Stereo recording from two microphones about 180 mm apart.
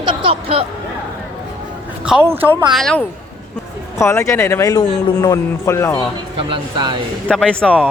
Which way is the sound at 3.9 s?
15° left (ahead or behind).